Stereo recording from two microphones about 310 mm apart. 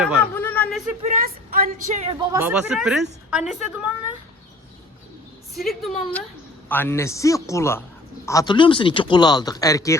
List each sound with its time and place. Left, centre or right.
0.0 s a sound: centre
1.0 s speech: right
2.3 s a woman's voice: centre
5.5 s speech: centre